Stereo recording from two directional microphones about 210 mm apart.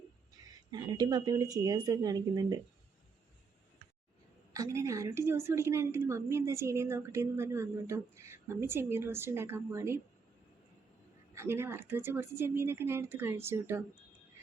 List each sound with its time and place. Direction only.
0.7 s a woman's voice: 20° right (ahead or behind)
4.5 s a woman's voice: 15° right (ahead or behind)
11.3 s a woman's voice: 10° right (ahead or behind)